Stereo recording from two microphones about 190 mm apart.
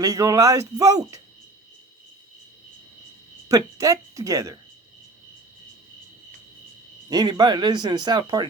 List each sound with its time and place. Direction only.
0.0 s speech: 15° right (ahead or behind)
3.5 s speech: 15° right (ahead or behind)
7.1 s speech: 20° right (ahead or behind)